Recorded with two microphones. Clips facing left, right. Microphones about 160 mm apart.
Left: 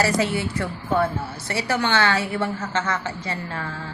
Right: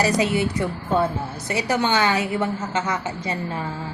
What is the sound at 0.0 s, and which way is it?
A woman's voice, 15° right (ahead or behind).